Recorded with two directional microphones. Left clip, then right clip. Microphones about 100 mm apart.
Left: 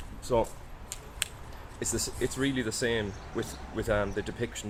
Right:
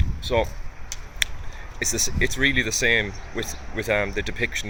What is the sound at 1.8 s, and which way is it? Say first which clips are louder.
Speech: right 9 dB; 15° right (ahead or behind).